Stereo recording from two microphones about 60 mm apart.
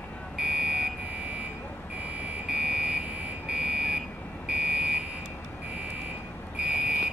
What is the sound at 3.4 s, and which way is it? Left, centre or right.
Car alarm, centre.